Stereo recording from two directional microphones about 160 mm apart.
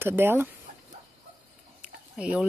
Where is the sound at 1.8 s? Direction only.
5° right (ahead or behind).